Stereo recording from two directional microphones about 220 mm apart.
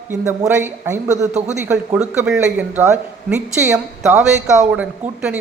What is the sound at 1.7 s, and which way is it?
A man's voice, 5° right (ahead or behind).